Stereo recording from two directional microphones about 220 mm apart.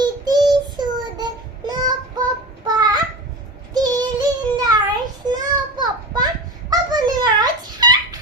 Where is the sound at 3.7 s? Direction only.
20° right (ahead or behind).